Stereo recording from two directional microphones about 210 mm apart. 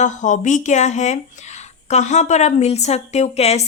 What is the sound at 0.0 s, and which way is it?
A woman's voice, 35° left (ahead or behind).